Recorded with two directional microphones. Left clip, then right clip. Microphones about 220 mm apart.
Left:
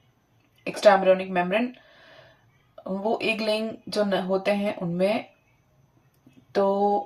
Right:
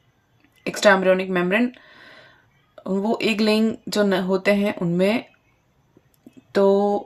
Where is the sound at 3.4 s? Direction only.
45° right (ahead or behind).